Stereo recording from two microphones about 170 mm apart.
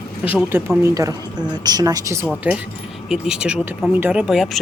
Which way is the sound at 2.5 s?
10° right (ahead or behind).